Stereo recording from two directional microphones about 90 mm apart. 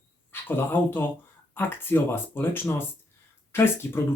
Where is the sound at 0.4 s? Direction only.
25° left (ahead or behind).